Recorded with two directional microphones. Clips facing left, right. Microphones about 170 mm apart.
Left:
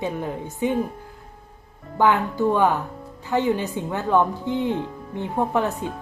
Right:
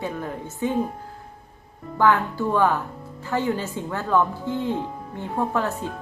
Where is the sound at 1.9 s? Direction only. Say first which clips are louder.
Even; 20° left (ahead or behind).